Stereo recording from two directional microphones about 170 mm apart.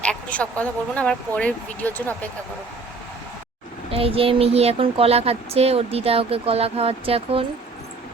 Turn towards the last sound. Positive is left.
turn(degrees=-35)  # may be behind; listen again after turning